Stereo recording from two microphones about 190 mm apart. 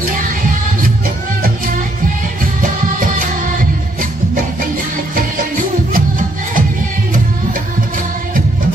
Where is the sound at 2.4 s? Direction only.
45° right (ahead or behind).